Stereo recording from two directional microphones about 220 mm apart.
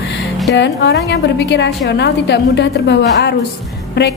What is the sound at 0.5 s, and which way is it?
A woman's voice, 55° left (ahead or behind).